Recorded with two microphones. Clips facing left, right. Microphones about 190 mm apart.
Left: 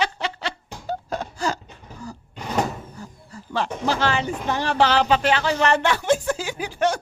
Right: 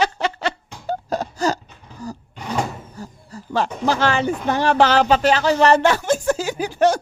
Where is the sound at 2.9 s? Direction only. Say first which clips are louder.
Right 4 dB; 40° right (ahead or behind).